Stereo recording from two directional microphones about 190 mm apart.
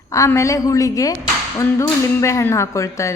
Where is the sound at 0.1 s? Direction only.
15° left (ahead or behind).